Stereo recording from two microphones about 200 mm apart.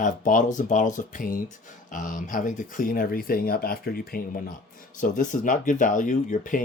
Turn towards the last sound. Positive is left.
turn(degrees=40)  # may be behind; listen again after turning